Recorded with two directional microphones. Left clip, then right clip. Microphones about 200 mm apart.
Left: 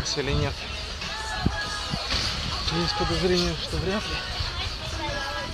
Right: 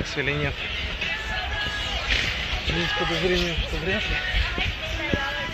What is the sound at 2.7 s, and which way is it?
Speech, 50° left (ahead or behind).